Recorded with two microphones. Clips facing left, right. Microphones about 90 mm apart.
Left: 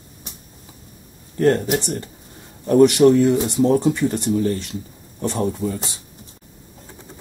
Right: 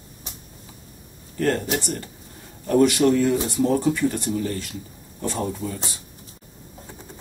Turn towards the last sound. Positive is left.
turn(degrees=20)  # may be behind; listen again after turning